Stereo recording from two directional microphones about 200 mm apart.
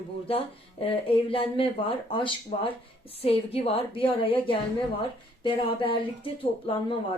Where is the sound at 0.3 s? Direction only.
25° left (ahead or behind).